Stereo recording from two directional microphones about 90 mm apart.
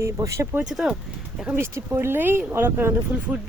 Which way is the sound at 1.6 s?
30° right (ahead or behind).